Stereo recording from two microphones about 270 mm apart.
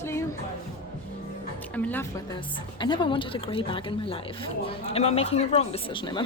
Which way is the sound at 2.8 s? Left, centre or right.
Centre.